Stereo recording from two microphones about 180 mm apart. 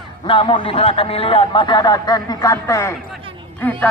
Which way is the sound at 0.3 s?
30° left (ahead or behind).